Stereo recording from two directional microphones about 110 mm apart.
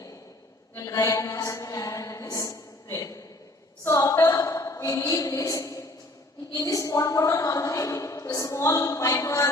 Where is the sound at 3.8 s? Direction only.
30° left (ahead or behind).